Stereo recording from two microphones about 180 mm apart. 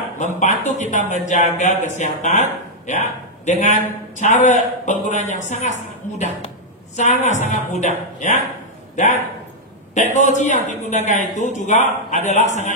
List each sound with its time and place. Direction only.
0.2 s a man's voice: 40° left (ahead or behind)